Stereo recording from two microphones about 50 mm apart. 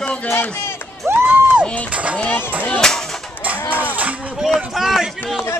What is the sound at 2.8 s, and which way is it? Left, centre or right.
Speech, centre.